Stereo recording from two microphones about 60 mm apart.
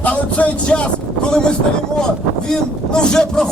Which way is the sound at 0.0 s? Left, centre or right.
Left.